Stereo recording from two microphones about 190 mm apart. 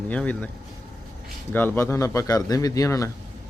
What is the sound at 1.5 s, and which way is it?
Speech, 10° left (ahead or behind).